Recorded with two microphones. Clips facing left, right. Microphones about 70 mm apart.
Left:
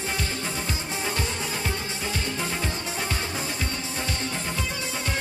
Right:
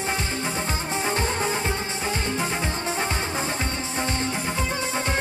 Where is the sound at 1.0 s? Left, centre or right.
Right.